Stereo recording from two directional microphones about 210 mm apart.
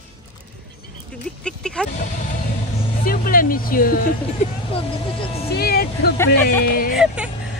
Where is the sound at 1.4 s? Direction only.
5° left (ahead or behind).